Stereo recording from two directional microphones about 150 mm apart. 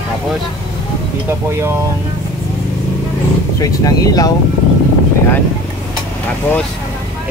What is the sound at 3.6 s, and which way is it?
Speech, 25° left (ahead or behind).